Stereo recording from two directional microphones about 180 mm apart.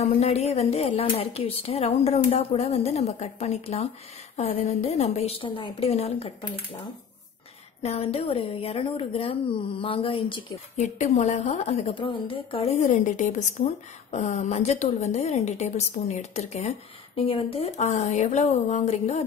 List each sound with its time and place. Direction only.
0.0 s a woman's voice: 35° left (ahead or behind)
7.8 s a woman's voice: 35° left (ahead or behind)